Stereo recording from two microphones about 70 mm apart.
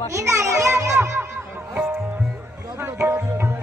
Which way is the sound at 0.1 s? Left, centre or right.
Right.